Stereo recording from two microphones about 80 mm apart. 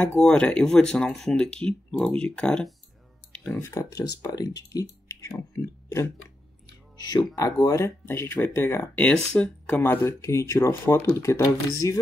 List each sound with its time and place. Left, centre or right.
0.0 s speech: centre
3.5 s speech: left
3.9 s speech: left
5.9 s speech: left
7.0 s speech: left
7.3 s speech: left
8.0 s speech: left
9.1 s speech: centre
9.8 s speech: left
10.2 s speech: left